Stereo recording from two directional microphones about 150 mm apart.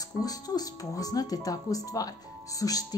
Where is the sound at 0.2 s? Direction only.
25° left (ahead or behind).